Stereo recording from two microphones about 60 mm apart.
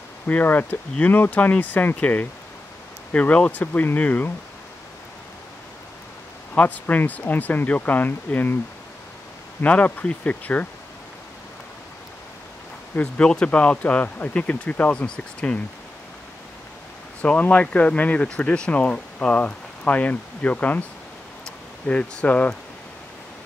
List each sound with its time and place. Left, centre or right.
0.3 s speech: left
6.5 s speech: left
9.6 s speech: left
12.9 s speech: centre
17.2 s speech: left
21.8 s speech: left